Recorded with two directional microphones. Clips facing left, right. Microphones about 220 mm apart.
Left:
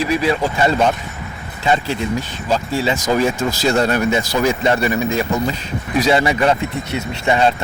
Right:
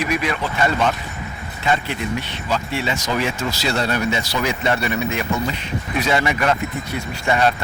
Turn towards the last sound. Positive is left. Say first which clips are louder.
# left 3 dB
turn(degrees=25)  # may be behind; listen again after turning